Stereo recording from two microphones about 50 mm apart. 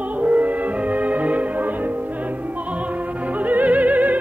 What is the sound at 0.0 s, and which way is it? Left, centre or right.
Music, right.